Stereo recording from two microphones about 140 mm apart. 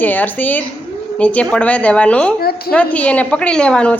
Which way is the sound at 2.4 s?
90° left.